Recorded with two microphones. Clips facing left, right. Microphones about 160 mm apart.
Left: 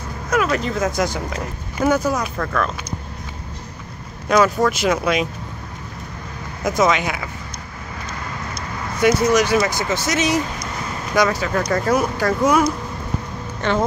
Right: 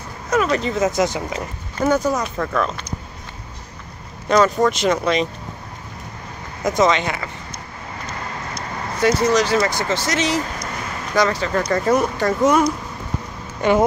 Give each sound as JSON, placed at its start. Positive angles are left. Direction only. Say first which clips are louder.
{"t": 0.3, "sound": "speech", "louder": "right 1 dB", "side_deg": 0}
{"t": 4.3, "sound": "speech", "louder": "even", "side_deg": 5}
{"t": 6.8, "sound": "speech", "louder": "right 1 dB", "side_deg": 5}
{"t": 9.0, "sound": "speech", "louder": "left 1 dB", "side_deg": 15}
{"t": 13.6, "sound": "speech", "louder": "right 4 dB", "side_deg": -10}